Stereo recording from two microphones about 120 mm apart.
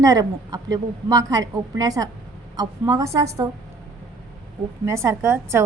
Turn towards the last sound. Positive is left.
turn(degrees=-25)  # may be behind; listen again after turning